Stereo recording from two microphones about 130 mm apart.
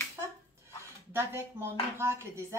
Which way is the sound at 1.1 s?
20° right (ahead or behind).